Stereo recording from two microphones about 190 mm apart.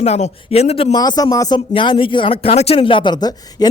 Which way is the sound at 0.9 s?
20° left (ahead or behind).